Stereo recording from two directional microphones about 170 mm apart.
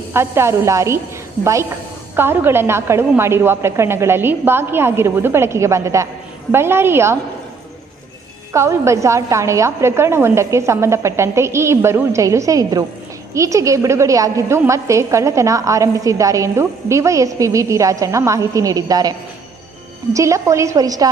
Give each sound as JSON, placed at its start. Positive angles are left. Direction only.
{"t": 0.1, "sound": "a woman's voice", "side_deg": -15}
{"t": 2.1, "sound": "a woman's voice", "side_deg": -15}
{"t": 8.5, "sound": "a woman's voice", "side_deg": -15}
{"t": 20.1, "sound": "a woman's voice", "side_deg": -20}